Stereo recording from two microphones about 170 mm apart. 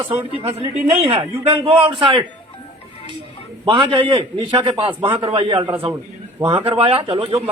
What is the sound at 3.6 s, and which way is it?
A man's voice, 30° right (ahead or behind).